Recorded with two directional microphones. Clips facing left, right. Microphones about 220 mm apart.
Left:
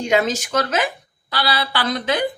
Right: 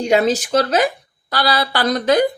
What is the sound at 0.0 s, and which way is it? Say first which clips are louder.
Speech: right 4 dB; 35° right (ahead or behind).